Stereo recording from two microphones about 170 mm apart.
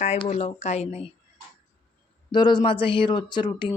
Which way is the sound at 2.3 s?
25° left (ahead or behind).